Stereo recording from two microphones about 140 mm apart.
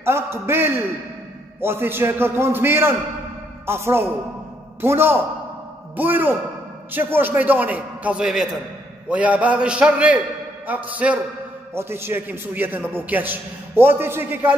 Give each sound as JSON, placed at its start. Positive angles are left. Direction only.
{"t": 0.0, "sound": "a man's voice", "side_deg": -20}